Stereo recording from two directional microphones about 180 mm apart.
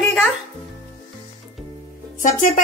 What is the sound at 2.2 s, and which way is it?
Speech, 50° left (ahead or behind).